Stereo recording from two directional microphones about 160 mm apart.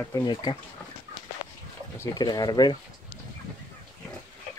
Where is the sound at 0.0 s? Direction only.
25° left (ahead or behind).